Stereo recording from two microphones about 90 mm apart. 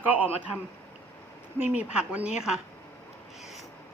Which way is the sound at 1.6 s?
15° right (ahead or behind).